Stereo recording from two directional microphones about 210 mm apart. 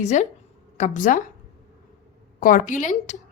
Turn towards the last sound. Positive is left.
turn(degrees=35)  # may be behind; listen again after turning